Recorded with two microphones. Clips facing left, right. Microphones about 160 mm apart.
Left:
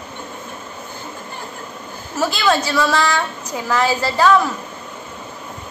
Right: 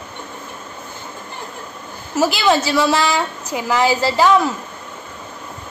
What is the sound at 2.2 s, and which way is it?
A woman's voice, 20° right (ahead or behind).